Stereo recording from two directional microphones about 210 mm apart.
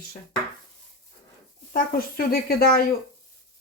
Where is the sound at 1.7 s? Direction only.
45° left (ahead or behind).